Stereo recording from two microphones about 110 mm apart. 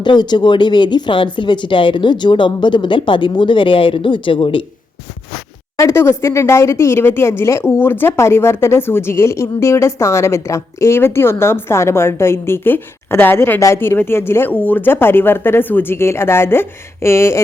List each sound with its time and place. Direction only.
0.0 s speech: 40° left (ahead or behind)
5.7 s speech: 25° left (ahead or behind)